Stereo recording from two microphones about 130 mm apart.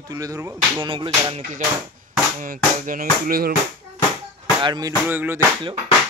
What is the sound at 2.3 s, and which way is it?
Music, 90° right.